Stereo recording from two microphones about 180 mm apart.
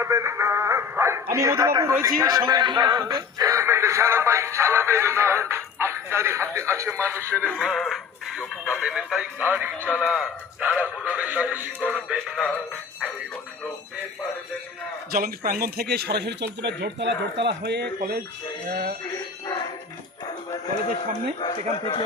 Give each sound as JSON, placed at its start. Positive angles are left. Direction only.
{"t": 0.0, "sound": "a man's voice", "side_deg": -15}
{"t": 7.6, "sound": "speech", "side_deg": 0}
{"t": 15.1, "sound": "speech", "side_deg": -55}
{"t": 21.3, "sound": "speech", "side_deg": 25}